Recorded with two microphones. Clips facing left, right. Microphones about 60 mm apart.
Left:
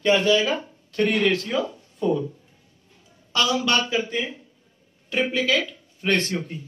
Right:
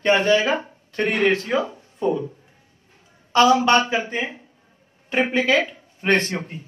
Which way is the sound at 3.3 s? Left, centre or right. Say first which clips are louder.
Right 7 dB; right.